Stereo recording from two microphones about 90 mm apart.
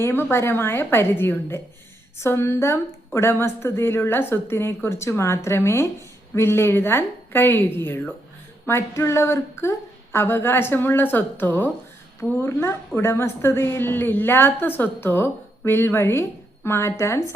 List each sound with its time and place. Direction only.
0.0 s a woman's voice: 25° left (ahead or behind)